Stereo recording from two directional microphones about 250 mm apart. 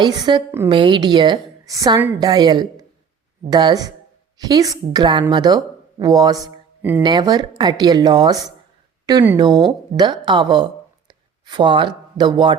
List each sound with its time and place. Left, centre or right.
0.0 s a woman's voice: centre
6.4 s a sound: centre
7.0 s a woman's voice: centre